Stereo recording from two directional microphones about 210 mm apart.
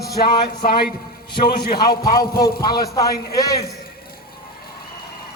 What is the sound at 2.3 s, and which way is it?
Speech, 45° left (ahead or behind).